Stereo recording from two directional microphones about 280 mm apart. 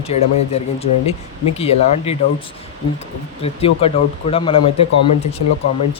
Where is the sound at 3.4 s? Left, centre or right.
Left.